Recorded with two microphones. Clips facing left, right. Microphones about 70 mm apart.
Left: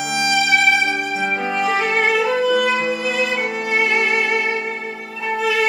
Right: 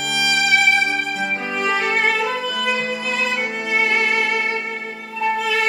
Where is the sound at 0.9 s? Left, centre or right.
Centre.